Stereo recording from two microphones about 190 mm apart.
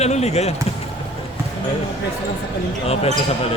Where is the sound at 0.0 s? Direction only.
35° left (ahead or behind).